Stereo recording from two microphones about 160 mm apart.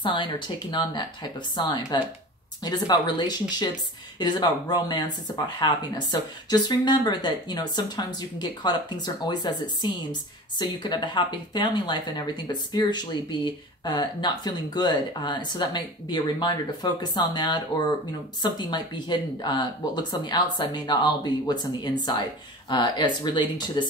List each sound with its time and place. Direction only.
0.0 s speech: 30° left (ahead or behind)